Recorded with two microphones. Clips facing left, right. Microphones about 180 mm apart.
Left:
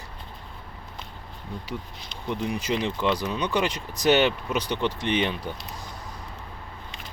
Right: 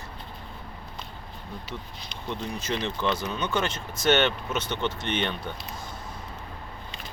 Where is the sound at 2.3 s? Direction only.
10° left (ahead or behind).